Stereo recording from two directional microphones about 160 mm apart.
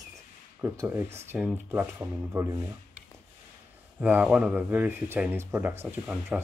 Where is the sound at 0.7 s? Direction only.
15° right (ahead or behind).